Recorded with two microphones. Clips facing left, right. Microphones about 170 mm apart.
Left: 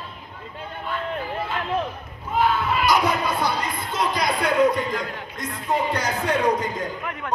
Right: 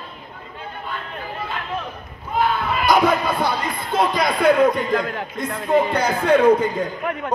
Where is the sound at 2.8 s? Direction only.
55° right (ahead or behind).